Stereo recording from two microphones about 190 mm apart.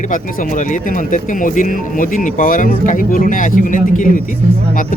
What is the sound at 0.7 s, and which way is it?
Speech, 45° left (ahead or behind).